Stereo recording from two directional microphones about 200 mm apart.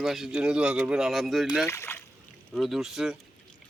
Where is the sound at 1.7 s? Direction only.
15° left (ahead or behind).